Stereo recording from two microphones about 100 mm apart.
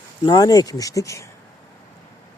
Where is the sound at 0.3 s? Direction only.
45° left (ahead or behind).